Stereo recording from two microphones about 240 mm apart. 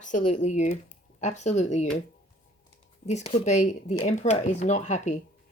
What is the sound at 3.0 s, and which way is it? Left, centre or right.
Speech, left.